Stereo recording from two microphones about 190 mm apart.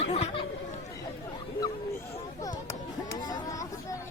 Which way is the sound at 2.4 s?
20° left (ahead or behind).